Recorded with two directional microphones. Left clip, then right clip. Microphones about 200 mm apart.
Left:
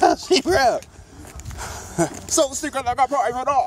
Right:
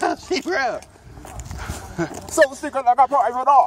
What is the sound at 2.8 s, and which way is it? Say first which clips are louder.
Speech: right 4 dB; 45° left (ahead or behind).